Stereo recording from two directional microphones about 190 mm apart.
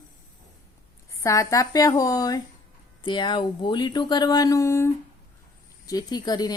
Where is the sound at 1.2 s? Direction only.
15° left (ahead or behind).